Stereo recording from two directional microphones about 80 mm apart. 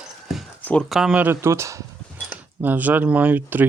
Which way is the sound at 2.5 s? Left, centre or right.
Right.